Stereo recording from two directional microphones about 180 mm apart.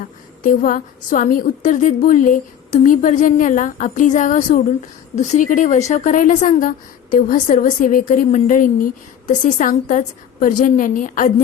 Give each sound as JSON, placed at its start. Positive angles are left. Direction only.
{"t": 0.0, "sound": "a woman's voice", "side_deg": 50}